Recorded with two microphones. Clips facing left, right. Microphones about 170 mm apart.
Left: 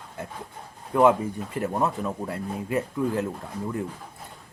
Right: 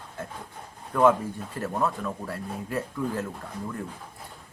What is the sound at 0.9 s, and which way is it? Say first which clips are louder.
Speech: left 2 dB; 15° left (ahead or behind).